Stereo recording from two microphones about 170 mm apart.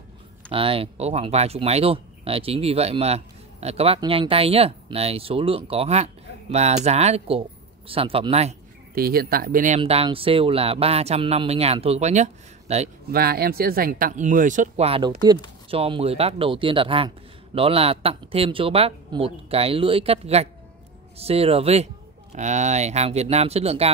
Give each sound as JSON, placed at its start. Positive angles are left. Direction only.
{"t": 0.5, "sound": "speech", "side_deg": -30}
{"t": 8.9, "sound": "speech", "side_deg": -60}
{"t": 9.8, "sound": "speech", "side_deg": -35}
{"t": 13.1, "sound": "speech", "side_deg": -65}
{"t": 14.9, "sound": "speech", "side_deg": -30}